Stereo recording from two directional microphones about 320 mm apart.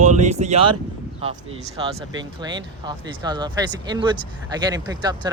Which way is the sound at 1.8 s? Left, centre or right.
Centre.